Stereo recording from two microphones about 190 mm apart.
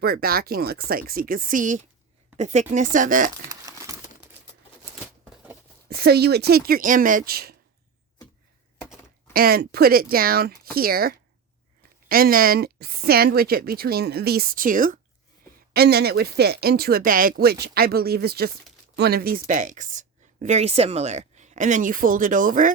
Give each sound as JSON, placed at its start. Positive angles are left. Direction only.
{"t": 0.0, "sound": "speech", "side_deg": -55}
{"t": 3.5, "sound": "crumpling", "side_deg": -15}
{"t": 5.3, "sound": "a sound", "side_deg": -5}
{"t": 5.9, "sound": "speech", "side_deg": -55}
{"t": 9.3, "sound": "speech", "side_deg": -50}
{"t": 15.7, "sound": "speech", "side_deg": -55}